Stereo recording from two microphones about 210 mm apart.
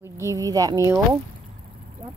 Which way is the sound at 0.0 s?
15° right (ahead or behind).